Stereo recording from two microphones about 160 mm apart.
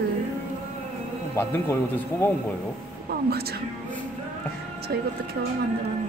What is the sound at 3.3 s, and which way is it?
Speech, 80° right.